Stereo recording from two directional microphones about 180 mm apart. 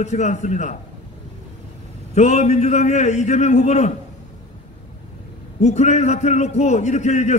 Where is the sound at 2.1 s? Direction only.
40° left (ahead or behind).